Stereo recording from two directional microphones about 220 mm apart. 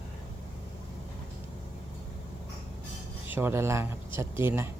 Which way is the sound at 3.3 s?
10° right (ahead or behind).